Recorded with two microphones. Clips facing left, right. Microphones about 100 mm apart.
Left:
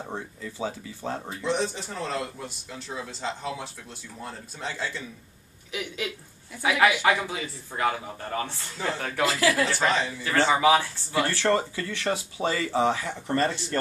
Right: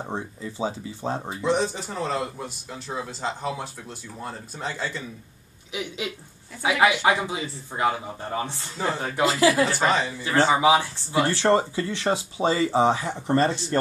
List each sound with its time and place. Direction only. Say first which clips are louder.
0.0 s speech: right 3 dB; 25° right (ahead or behind)
1.3 s speech: right 4 dB; 5° right (ahead or behind)
5.7 s speech: right 1 dB; 20° right (ahead or behind)
9.7 s speech: right 2 dB; 5° right (ahead or behind)
10.5 s speech: left 1 dB; 20° right (ahead or behind)